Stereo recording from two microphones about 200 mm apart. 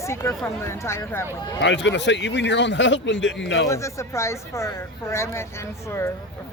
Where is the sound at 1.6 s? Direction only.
65° left (ahead or behind).